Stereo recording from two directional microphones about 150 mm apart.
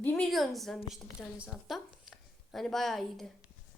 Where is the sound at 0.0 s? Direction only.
5° left (ahead or behind).